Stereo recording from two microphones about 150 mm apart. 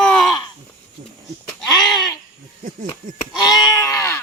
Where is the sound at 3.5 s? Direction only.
25° left (ahead or behind).